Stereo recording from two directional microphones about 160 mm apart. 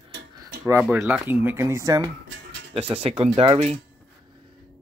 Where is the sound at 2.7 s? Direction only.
40° right (ahead or behind).